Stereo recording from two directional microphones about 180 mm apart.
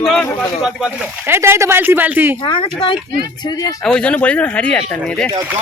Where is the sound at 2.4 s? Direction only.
30° left (ahead or behind).